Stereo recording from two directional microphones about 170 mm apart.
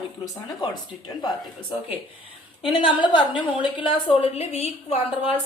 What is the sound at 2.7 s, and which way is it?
A woman's voice, 30° left (ahead or behind).